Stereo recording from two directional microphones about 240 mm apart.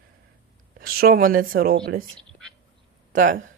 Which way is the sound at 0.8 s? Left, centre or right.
Right.